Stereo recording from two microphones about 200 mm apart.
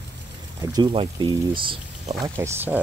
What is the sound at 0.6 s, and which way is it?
Speech, 20° right (ahead or behind).